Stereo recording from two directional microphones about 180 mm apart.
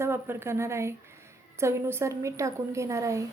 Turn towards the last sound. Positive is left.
turn(degrees=-15)  # may be behind; listen again after turning